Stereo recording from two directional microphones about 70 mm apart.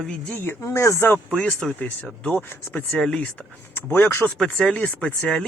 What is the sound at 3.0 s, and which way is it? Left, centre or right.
Speech, centre.